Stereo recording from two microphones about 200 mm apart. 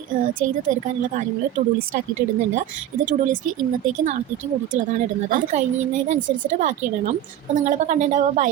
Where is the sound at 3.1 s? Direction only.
40° right (ahead or behind).